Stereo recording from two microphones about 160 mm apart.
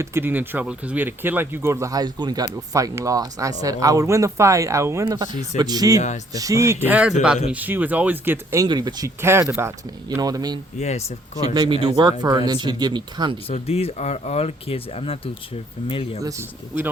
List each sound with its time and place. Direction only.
0.0 s speech: 15° right (ahead or behind)
8.6 s speech: 25° right (ahead or behind)
10.8 s speech: 45° left (ahead or behind)
11.4 s speech: 25° right (ahead or behind)
13.5 s speech: 40° left (ahead or behind)
16.2 s speech: 15° right (ahead or behind)